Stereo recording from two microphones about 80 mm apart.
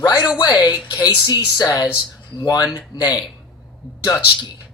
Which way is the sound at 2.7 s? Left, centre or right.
Left.